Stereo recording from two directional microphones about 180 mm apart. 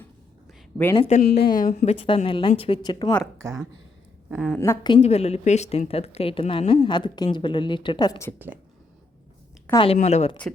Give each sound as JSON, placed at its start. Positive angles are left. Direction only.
{"t": 0.9, "sound": "speech", "side_deg": 35}
{"t": 1.2, "sound": "speech", "side_deg": 60}
{"t": 1.5, "sound": "speech", "side_deg": 45}
{"t": 2.0, "sound": "a woman's voice", "side_deg": 30}
{"t": 3.3, "sound": "a woman's voice", "side_deg": -15}
{"t": 4.4, "sound": "a woman's voice", "side_deg": 10}
{"t": 4.9, "sound": "a woman's voice", "side_deg": 35}
{"t": 9.7, "sound": "speech", "side_deg": 30}